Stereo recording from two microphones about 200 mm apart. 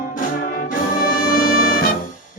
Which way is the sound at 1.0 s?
45° left (ahead or behind).